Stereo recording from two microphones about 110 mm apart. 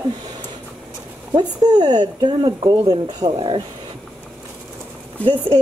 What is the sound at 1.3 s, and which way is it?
Speech, 40° right (ahead or behind).